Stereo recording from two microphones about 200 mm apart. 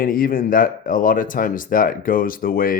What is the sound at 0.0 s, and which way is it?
Speech, 45° left (ahead or behind).